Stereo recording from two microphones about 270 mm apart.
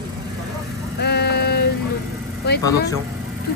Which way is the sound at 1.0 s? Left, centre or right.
Left.